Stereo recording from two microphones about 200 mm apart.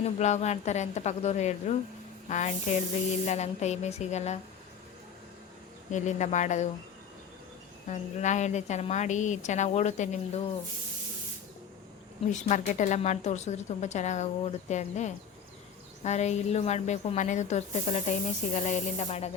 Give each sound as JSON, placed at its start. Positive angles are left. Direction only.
{"t": 0.0, "sound": "a woman's voice", "side_deg": 35}
{"t": 5.9, "sound": "a woman's voice", "side_deg": 35}
{"t": 7.9, "sound": "a woman's voice", "side_deg": 35}
{"t": 12.3, "sound": "a woman's voice", "side_deg": 40}